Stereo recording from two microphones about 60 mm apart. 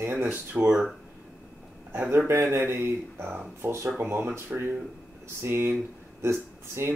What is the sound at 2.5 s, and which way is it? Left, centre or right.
Speech, right.